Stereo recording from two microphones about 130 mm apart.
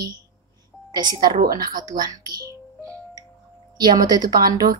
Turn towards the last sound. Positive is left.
turn(degrees=-30)  # may be behind; listen again after turning